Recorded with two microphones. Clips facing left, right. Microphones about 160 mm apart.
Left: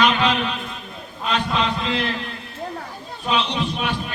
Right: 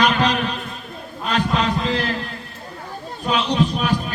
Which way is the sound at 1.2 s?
45° right (ahead or behind).